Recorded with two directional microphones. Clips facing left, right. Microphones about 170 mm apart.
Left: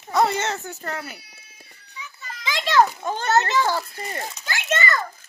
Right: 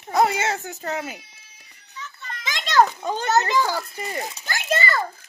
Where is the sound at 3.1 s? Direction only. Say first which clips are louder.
Even; 15° right (ahead or behind).